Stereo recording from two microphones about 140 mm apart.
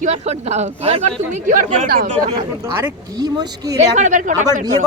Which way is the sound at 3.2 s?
30° right (ahead or behind).